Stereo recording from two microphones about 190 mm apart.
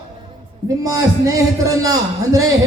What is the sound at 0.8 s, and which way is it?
A man's voice, 20° right (ahead or behind).